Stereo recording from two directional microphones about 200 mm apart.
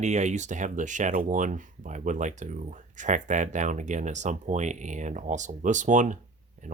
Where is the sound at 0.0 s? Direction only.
35° right (ahead or behind).